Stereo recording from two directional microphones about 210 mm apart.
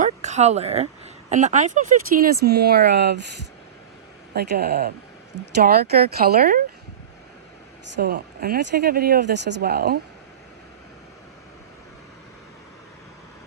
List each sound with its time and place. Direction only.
0.0 s speech: 35° right (ahead or behind); by 3.2 s 50° right (ahead or behind)
4.4 s speech: 50° right (ahead or behind)
7.9 s speech: 50° right (ahead or behind)